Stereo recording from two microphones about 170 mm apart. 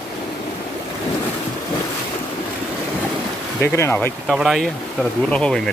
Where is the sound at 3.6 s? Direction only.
15° left (ahead or behind).